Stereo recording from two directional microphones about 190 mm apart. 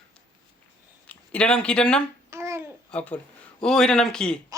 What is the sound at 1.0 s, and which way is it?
Speech, 5° left (ahead or behind).